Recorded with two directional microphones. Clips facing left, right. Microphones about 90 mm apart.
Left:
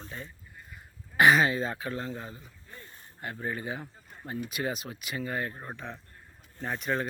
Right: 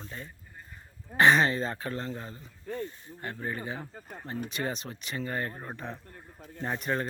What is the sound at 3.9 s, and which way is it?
Speech, 55° right (ahead or behind).